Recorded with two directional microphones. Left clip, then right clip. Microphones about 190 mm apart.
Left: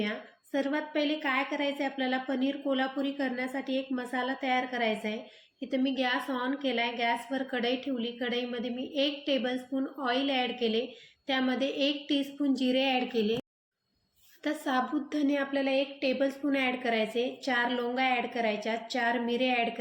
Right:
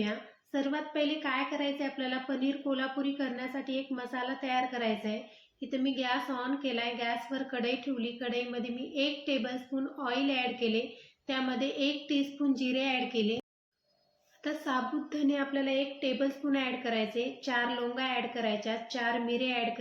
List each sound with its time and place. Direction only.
0.5 s a woman's voice: 35° left (ahead or behind)
14.4 s a woman's voice: 35° left (ahead or behind)